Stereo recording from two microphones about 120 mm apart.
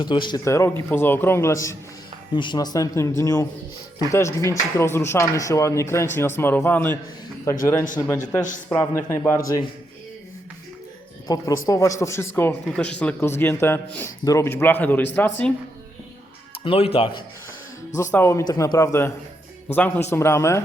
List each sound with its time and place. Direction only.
0.0 s speech: 40° left (ahead or behind)
0.4 s speech: 25° left (ahead or behind)
2.3 s speech: 40° left (ahead or behind)
11.3 s speech: 30° left (ahead or behind)
12.7 s speech: 10° left (ahead or behind)
13.1 s speech: 20° left (ahead or behind)
16.6 s speech: 50° left (ahead or behind)
18.1 s speech: 20° left (ahead or behind)
18.4 s speech: 30° left (ahead or behind)
19.6 s speech: 10° left (ahead or behind)
20.1 s speech: 20° left (ahead or behind)